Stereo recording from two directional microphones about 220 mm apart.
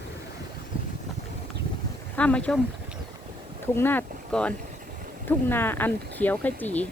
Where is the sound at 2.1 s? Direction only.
5° left (ahead or behind).